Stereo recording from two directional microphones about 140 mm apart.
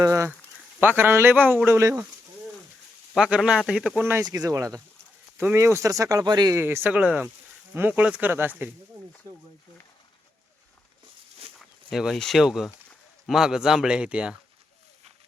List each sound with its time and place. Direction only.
0.0 s a man's voice: 20° right (ahead or behind)
3.2 s a man's voice: 5° right (ahead or behind)
4.2 s speech: 25° right (ahead or behind)
6.6 s a man's voice: 15° right (ahead or behind)
11.9 s speech: centre (ahead or behind)